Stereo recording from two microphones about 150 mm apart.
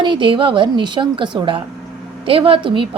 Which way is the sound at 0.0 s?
35° right (ahead or behind).